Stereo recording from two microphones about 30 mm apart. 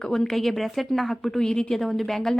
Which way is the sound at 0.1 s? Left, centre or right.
Centre.